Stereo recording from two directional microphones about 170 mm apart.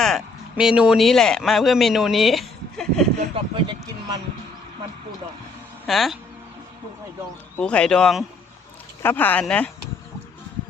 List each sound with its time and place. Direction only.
0.5 s speech: 5° right (ahead or behind)
3.3 s speech: 30° right (ahead or behind)
5.8 s speech: centre (ahead or behind)
7.5 s speech: 5° left (ahead or behind)